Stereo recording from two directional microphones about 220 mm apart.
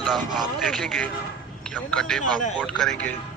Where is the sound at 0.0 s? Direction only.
Centre (ahead or behind).